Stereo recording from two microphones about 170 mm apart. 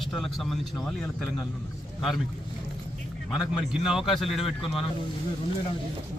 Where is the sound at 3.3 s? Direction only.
Centre (ahead or behind).